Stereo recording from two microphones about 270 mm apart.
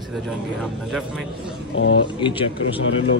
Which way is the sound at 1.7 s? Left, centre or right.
Left.